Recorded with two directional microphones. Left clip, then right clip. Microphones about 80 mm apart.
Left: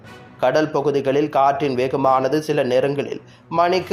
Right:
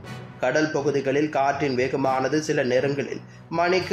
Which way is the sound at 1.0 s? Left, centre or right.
Centre.